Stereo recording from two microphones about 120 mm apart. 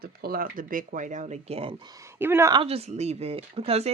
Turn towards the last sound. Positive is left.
turn(degrees=-55)  # may be behind; listen again after turning